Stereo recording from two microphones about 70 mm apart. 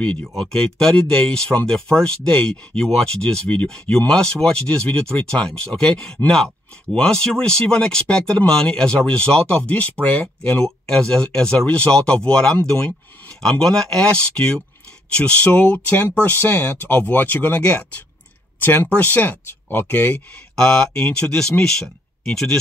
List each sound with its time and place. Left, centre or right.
0.2 s speech: centre
18.6 s speech: left
20.5 s speech: centre